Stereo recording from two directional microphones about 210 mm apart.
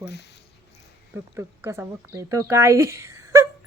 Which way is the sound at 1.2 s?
10° right (ahead or behind).